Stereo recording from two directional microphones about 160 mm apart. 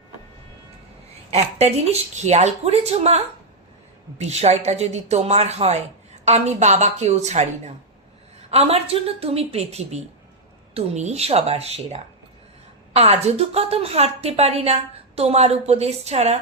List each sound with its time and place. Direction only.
1.3 s a woman's voice: 40° right (ahead or behind)
4.2 s a woman's voice: 45° right (ahead or behind)